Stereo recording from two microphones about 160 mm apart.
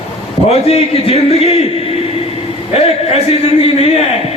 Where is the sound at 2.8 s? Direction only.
40° left (ahead or behind).